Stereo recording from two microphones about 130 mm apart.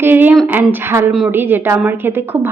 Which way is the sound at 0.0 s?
15° right (ahead or behind).